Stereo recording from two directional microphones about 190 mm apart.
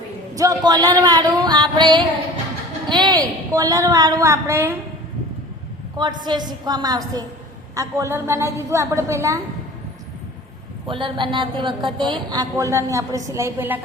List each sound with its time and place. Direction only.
0.3 s a woman's voice: 15° right (ahead or behind)
6.0 s a woman's voice: 20° right (ahead or behind)
10.8 s speech: 25° right (ahead or behind)